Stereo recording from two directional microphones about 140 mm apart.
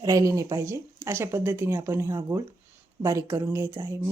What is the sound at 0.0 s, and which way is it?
Speech, 25° right (ahead or behind).